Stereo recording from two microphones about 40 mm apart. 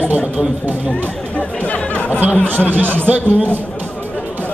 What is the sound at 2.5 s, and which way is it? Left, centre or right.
Speech, right.